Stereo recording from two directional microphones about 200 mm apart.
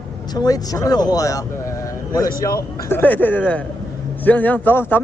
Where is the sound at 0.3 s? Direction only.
20° left (ahead or behind).